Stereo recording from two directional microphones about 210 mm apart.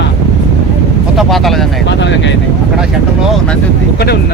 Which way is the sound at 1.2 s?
Centre (ahead or behind).